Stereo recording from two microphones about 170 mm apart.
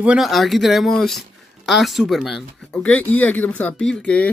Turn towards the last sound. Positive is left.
turn(degrees=5)  # may be behind; listen again after turning